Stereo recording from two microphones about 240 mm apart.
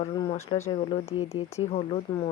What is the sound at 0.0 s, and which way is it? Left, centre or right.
Speech, left.